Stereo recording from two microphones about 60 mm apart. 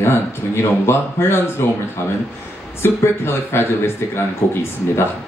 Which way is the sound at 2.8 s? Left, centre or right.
Left.